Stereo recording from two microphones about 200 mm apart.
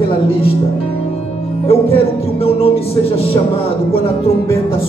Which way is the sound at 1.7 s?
30° left (ahead or behind).